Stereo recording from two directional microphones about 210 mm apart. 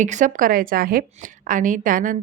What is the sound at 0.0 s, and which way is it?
A woman's voice, 35° right (ahead or behind).